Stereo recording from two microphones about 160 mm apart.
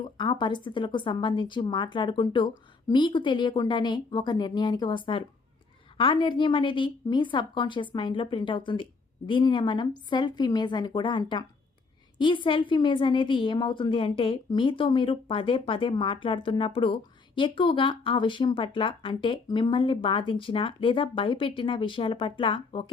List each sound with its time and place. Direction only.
0.2 s a woman's voice: 30° left (ahead or behind)